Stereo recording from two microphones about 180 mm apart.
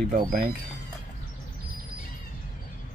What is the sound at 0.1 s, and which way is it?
Speech, 50° right (ahead or behind).